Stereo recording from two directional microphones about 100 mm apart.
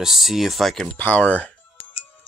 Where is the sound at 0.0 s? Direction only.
Centre (ahead or behind).